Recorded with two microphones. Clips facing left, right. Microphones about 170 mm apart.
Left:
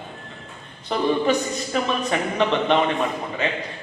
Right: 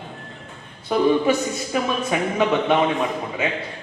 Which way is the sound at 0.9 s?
10° right (ahead or behind).